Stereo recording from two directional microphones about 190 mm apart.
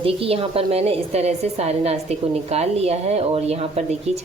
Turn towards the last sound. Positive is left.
turn(degrees=-35)  # may be behind; listen again after turning